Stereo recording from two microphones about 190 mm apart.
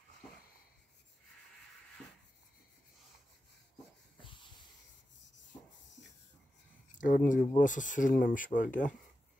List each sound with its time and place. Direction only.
4.2 s wheeze: 25° left (ahead or behind)
7.0 s speech: 45° left (ahead or behind)